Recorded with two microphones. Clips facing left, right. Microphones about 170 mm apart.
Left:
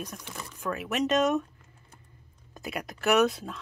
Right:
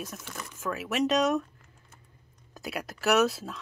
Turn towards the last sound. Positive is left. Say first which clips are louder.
# left 1 dB
turn(degrees=0)  # may be behind; listen again after turning